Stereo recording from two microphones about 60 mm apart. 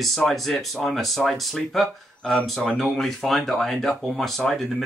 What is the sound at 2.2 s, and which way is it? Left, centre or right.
Speech, centre.